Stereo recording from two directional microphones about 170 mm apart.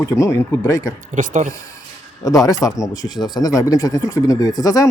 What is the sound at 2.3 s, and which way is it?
Speech, 20° left (ahead or behind).